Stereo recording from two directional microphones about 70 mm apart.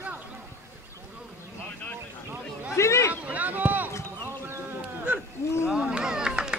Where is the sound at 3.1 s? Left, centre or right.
Right.